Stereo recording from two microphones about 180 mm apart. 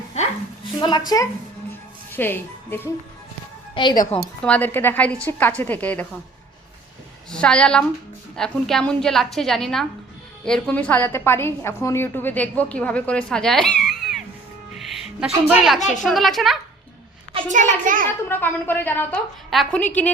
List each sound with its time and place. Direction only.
0.8 s a woman's voice: 25° left (ahead or behind)
2.1 s speech: 10° left (ahead or behind)
3.8 s a woman's voice: 30° left (ahead or behind)
4.1 s a woman's voice: 10° left (ahead or behind)
7.3 s a woman's voice: 5° left (ahead or behind)
14.8 s music: centre (ahead or behind)
15.3 s a child's voice: 5° right (ahead or behind)
17.5 s a child's voice: 45° right (ahead or behind)
18.3 s a woman's voice: 10° left (ahead or behind)